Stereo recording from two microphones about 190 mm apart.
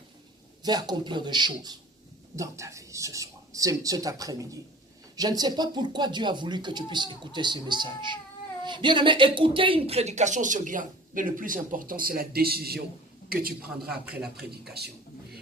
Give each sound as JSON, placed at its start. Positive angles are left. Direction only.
{"t": 0.6, "sound": "a man's voice", "side_deg": -20}
{"t": 13.6, "sound": "a man's voice", "side_deg": -5}
{"t": 14.6, "sound": "speech", "side_deg": -60}